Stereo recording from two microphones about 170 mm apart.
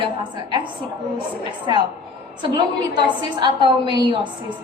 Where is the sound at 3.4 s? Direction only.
25° right (ahead or behind).